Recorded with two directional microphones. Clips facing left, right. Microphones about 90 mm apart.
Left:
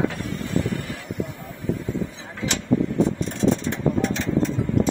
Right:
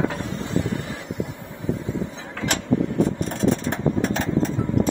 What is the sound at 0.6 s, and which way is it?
Vehicle, 20° right (ahead or behind).